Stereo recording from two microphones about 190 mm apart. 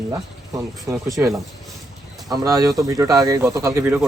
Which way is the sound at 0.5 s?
15° right (ahead or behind).